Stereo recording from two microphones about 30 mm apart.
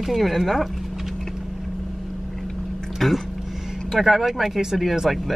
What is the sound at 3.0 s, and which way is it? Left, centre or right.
Speech, centre.